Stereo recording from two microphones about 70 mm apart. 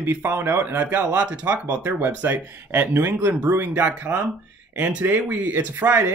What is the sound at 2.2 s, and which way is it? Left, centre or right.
Speech, right.